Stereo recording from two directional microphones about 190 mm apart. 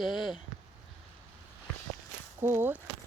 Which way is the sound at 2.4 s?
10° right (ahead or behind).